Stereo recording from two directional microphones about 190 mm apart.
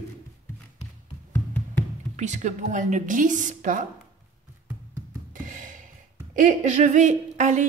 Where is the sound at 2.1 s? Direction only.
40° right (ahead or behind).